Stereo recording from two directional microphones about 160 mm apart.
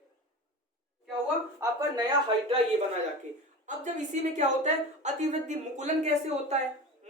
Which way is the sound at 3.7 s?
50° right (ahead or behind).